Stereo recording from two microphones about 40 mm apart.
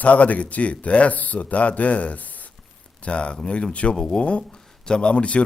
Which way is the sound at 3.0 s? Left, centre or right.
Left.